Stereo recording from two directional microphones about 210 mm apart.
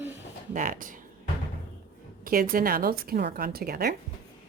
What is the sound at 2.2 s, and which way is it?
A woman's voice, 45° right (ahead or behind).